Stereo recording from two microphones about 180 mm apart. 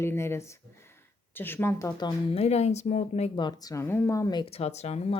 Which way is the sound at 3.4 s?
20° left (ahead or behind).